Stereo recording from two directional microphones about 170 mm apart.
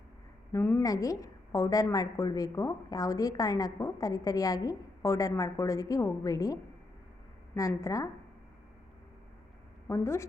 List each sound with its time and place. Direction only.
0.5 s a woman's voice: 15° left (ahead or behind)
9.8 s a woman's voice: 15° left (ahead or behind)